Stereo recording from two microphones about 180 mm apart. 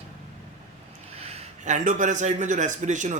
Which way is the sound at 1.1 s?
40° right (ahead or behind).